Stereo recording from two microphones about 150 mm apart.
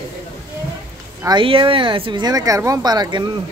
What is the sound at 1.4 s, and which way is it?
Speech, 35° right (ahead or behind).